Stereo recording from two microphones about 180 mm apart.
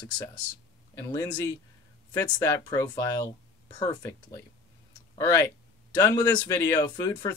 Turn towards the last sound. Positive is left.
turn(degrees=15)  # may be behind; listen again after turning